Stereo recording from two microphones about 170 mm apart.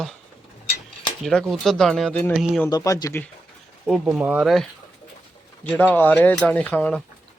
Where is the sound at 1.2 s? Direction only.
Centre (ahead or behind).